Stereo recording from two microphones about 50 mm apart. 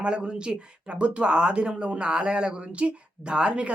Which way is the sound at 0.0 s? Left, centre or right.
Centre.